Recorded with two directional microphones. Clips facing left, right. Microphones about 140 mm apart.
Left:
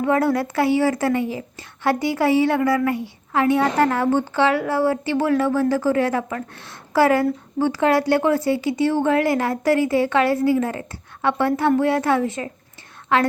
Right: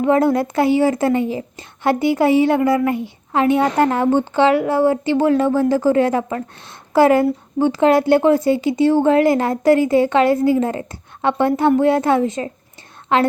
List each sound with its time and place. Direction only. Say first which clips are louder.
0.0 s a woman's voice: right 4 dB; 20° right (ahead or behind)